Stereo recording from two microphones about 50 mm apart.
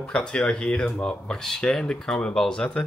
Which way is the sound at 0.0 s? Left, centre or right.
Centre.